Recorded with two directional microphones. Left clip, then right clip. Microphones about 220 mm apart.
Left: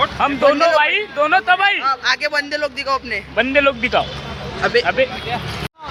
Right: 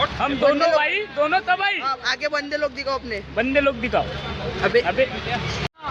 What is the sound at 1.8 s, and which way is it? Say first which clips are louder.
A man's voice: left 6 dB; 10° right (ahead or behind).